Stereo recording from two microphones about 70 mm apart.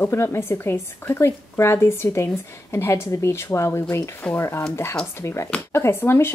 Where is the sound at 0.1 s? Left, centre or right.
Left.